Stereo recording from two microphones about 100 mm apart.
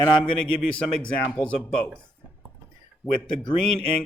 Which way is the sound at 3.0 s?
Centre (ahead or behind).